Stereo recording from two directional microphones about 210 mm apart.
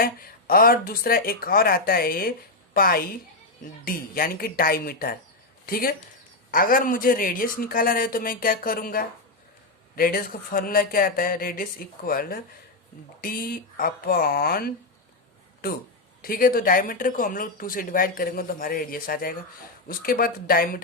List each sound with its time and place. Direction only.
0.0 s speech: 45° left (ahead or behind)
16.2 s speech: 45° left (ahead or behind)